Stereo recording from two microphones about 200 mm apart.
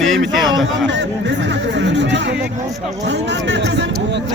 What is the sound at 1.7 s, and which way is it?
Speech, 60° right (ahead or behind).